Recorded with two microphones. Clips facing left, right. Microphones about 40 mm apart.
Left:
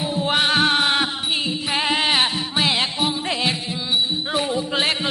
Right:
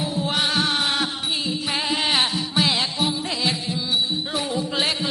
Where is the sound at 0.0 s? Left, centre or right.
Left.